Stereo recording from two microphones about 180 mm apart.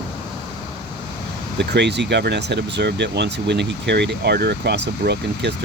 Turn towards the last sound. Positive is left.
turn(degrees=-70)  # may be behind; listen again after turning